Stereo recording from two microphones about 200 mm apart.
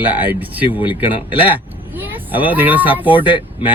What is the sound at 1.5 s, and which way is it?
Speech, 10° right (ahead or behind).